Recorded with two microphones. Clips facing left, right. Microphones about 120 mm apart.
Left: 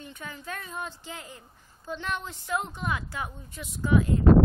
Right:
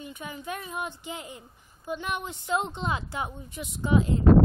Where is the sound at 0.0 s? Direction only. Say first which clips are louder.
Right 3 dB; 15° right (ahead or behind).